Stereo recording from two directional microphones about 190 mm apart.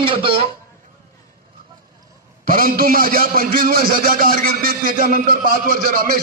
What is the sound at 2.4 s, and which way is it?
A man's voice, 50° right (ahead or behind).